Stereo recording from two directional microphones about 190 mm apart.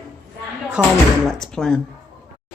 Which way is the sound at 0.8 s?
5° right (ahead or behind).